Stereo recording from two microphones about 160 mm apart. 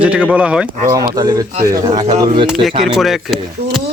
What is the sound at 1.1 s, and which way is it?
Speech, 25° right (ahead or behind).